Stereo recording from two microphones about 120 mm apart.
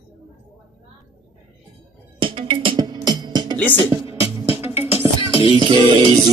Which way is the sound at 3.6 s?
15° left (ahead or behind).